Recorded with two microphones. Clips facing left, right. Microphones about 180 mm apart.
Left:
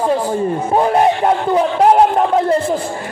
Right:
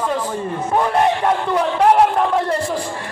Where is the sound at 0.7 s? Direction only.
30° left (ahead or behind).